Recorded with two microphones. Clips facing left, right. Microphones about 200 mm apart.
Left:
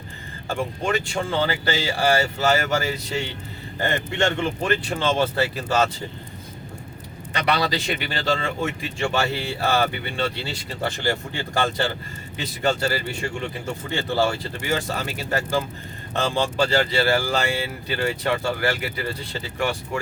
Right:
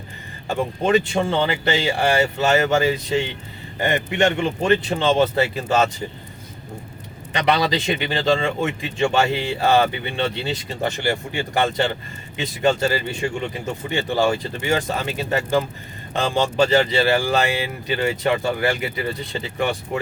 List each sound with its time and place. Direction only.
0.9 s speech: 20° right (ahead or behind)
7.3 s speech: 20° right (ahead or behind)